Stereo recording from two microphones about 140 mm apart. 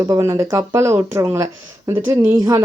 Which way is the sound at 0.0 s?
25° right (ahead or behind).